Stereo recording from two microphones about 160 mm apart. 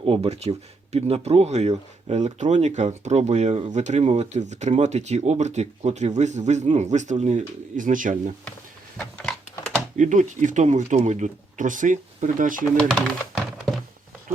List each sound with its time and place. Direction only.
0.0 s speech: 35° right (ahead or behind); by 8.1 s 55° right (ahead or behind)
9.1 s typing: 5° left (ahead or behind)
10.0 s speech: 50° right (ahead or behind)
12.9 s typing: centre (ahead or behind)